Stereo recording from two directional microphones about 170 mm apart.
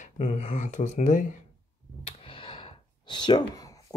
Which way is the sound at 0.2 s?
45° left (ahead or behind).